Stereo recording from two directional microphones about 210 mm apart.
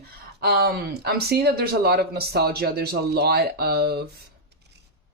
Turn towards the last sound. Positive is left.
turn(degrees=-50)  # may be behind; listen again after turning